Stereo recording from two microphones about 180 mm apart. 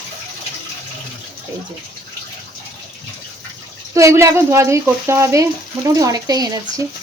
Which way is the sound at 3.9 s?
15° right (ahead or behind).